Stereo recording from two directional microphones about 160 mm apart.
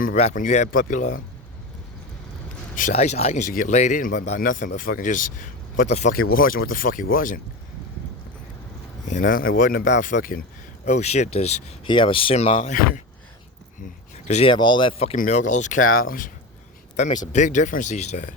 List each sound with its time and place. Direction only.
0.2 s speech: 45° left (ahead or behind)
2.9 s speech: 40° left (ahead or behind)
5.9 s speech: 45° left (ahead or behind)
6.3 s speech: 65° left (ahead or behind)
9.0 s speech: 55° left (ahead or behind)
10.8 s speech: 45° left (ahead or behind)
11.9 s speech: 30° left (ahead or behind)
14.3 s speech: 45° left (ahead or behind)
14.5 s speech: 30° left (ahead or behind)
15.1 s speech: 50° left (ahead or behind)
17.3 s speech: 50° left (ahead or behind)